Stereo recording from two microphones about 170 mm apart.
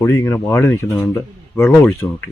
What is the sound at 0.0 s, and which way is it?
Speech, 15° left (ahead or behind).